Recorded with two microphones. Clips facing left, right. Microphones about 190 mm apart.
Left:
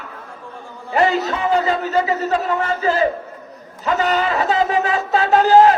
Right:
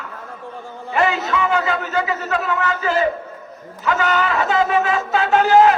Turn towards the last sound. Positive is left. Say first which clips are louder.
# left 1 dB
turn(degrees=35)  # may be behind; listen again after turning